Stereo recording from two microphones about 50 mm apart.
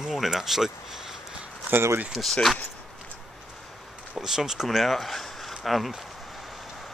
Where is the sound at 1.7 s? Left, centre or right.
Right.